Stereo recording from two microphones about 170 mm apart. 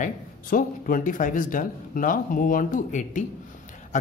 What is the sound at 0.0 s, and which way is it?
Speech, 55° left (ahead or behind).